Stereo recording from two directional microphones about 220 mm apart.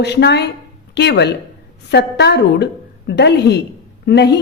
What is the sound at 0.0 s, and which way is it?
A woman's voice, 50° left (ahead or behind).